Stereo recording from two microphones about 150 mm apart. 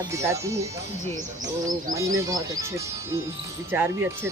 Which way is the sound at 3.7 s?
15° right (ahead or behind).